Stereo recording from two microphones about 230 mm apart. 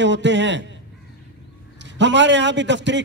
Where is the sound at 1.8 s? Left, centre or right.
Right.